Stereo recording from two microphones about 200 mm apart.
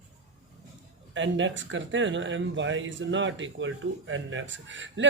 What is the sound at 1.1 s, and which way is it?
Speech, 70° right (ahead or behind).